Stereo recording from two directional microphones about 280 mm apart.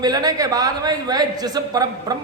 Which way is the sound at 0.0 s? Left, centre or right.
Centre.